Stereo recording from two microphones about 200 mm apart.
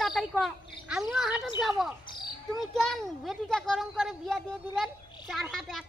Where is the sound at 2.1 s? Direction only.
20° left (ahead or behind).